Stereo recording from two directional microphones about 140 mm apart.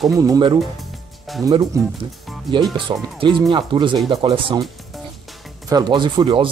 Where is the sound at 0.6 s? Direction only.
Centre (ahead or behind).